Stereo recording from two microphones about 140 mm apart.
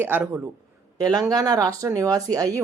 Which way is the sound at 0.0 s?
15° right (ahead or behind).